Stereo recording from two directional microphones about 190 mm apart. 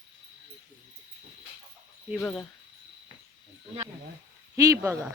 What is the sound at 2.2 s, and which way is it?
Speech, 5° left (ahead or behind).